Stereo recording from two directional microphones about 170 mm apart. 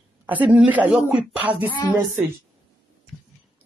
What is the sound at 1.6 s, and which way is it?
Music, 30° left (ahead or behind).